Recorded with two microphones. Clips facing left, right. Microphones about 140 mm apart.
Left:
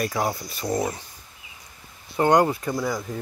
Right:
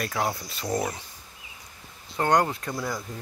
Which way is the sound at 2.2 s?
10° left (ahead or behind).